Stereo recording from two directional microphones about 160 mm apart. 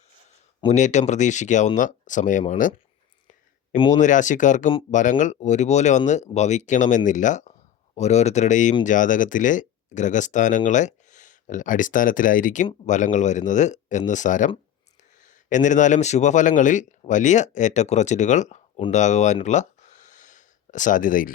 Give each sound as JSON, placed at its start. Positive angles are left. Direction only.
{"t": 0.7, "sound": "speech", "side_deg": 45}
{"t": 3.8, "sound": "speech", "side_deg": 50}
{"t": 18.9, "sound": "a sound", "side_deg": 45}